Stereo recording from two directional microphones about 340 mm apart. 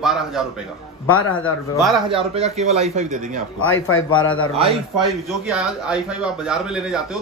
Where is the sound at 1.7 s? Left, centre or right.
Centre.